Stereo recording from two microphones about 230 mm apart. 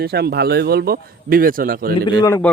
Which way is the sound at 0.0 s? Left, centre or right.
Right.